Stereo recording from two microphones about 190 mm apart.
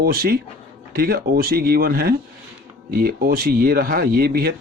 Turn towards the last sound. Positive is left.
turn(degrees=-55)  # may be behind; listen again after turning